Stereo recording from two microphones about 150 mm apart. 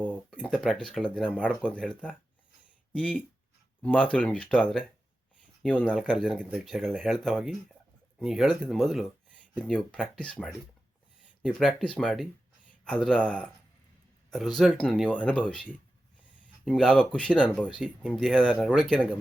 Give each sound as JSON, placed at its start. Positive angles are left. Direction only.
{"t": 0.0, "sound": "speech", "side_deg": 5}
{"t": 16.6, "sound": "speech", "side_deg": 5}